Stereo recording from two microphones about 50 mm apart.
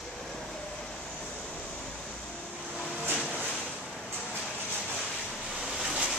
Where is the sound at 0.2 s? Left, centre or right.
Centre.